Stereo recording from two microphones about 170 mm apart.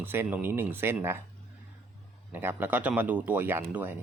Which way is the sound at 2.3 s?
10° right (ahead or behind).